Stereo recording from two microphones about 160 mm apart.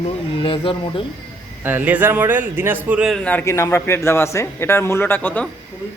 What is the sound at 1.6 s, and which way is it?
Speech, 10° right (ahead or behind).